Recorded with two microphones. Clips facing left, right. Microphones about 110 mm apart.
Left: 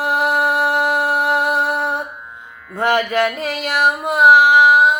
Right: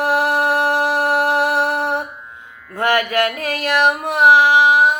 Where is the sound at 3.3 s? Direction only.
60° right (ahead or behind).